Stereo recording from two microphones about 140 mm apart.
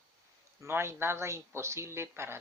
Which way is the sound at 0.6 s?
15° right (ahead or behind).